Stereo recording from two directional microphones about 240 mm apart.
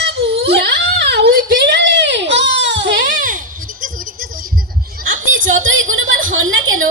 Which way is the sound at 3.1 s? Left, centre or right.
Right.